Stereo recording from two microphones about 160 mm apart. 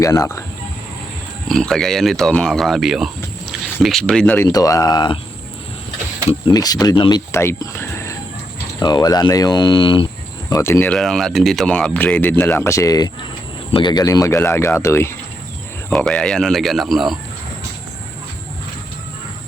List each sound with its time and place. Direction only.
0.0 s speech: 20° left (ahead or behind)
1.5 s speech: 5° left (ahead or behind)
4.4 s speech: 20° left (ahead or behind)
6.5 s speech: 25° left (ahead or behind)
7.3 s speech: 15° left (ahead or behind)
10.5 s speech: 15° left (ahead or behind)
10.9 s speech: centre (ahead or behind)
15.9 s speech: 5° left (ahead or behind)